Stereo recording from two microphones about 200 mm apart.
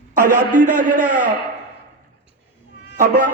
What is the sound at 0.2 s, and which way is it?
A man's voice, 40° right (ahead or behind).